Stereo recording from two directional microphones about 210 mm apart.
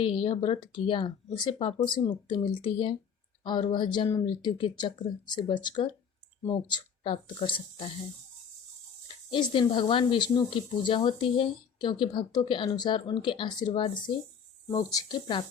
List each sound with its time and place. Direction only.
0.0 s speech: 25° left (ahead or behind)
9.3 s speech: 20° left (ahead or behind)